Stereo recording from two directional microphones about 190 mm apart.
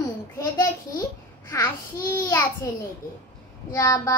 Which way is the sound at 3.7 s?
15° left (ahead or behind).